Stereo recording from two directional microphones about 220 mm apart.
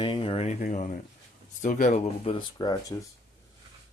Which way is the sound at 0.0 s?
25° left (ahead or behind).